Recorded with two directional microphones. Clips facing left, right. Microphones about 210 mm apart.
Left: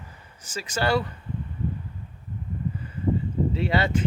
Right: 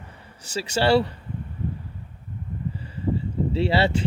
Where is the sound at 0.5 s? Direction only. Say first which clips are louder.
Right 5 dB; 30° right (ahead or behind).